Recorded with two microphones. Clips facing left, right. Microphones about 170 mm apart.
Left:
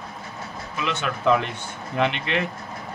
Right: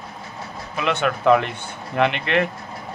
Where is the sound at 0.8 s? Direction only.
60° right (ahead or behind).